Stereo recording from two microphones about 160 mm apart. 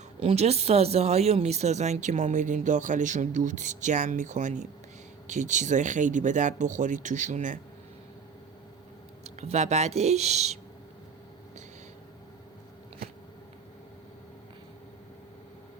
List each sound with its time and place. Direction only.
0.2 s speech: 40° right (ahead or behind)
9.2 s speech: 45° right (ahead or behind)